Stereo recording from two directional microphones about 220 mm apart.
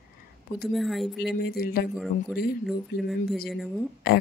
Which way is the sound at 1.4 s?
45° left (ahead or behind).